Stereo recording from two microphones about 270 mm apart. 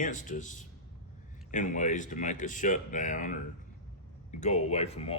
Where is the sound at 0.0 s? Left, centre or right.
Left.